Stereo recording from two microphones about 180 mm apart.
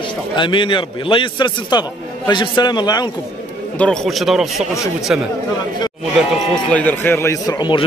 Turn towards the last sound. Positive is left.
turn(degrees=25)  # may be behind; listen again after turning